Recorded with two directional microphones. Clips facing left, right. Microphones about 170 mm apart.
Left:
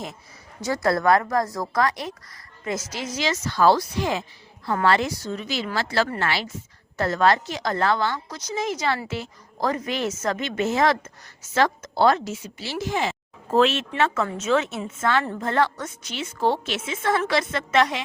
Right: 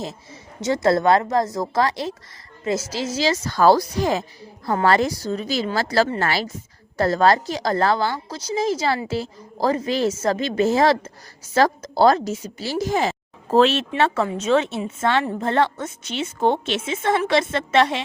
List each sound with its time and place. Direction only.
0.6 s a woman's voice: 20° right (ahead or behind)